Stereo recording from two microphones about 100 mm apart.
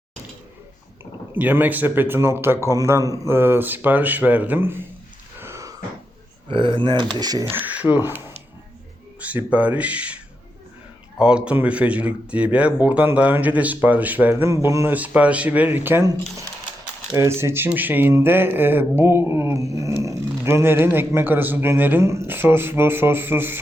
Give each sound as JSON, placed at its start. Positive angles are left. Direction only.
{"t": 1.4, "sound": "a sound", "side_deg": -15}
{"t": 3.3, "sound": "speech", "side_deg": -25}
{"t": 5.4, "sound": "wheeze", "side_deg": -30}
{"t": 6.5, "sound": "speech", "side_deg": -55}
{"t": 7.5, "sound": "speech", "side_deg": -15}
{"t": 9.2, "sound": "speech", "side_deg": -15}
{"t": 11.2, "sound": "speech", "side_deg": -10}
{"t": 14.5, "sound": "a sound", "side_deg": -30}
{"t": 14.9, "sound": "speech", "side_deg": -15}
{"t": 17.2, "sound": "a sound", "side_deg": -25}